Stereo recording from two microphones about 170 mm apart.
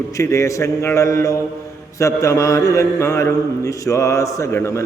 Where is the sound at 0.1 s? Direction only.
15° left (ahead or behind).